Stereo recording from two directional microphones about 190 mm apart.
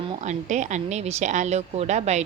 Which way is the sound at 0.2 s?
40° right (ahead or behind).